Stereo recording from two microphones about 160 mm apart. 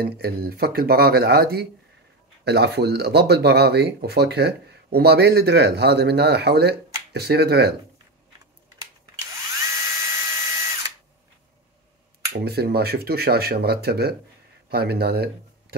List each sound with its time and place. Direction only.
0.0 s speech: 70° right (ahead or behind); by 7.7 s 90° right
9.6 s drill: 20° right (ahead or behind)
12.3 s speech: 80° right